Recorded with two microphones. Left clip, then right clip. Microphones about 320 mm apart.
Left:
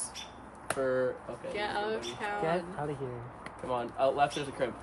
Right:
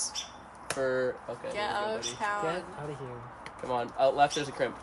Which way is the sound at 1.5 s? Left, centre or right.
Centre.